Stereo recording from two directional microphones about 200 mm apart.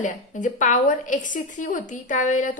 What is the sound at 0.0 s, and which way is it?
A woman's voice, 40° left (ahead or behind).